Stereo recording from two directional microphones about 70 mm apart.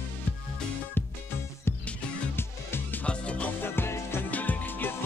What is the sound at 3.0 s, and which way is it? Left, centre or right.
Music, centre.